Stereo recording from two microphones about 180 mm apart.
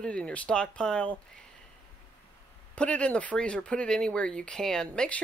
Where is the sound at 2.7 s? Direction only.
5° left (ahead or behind).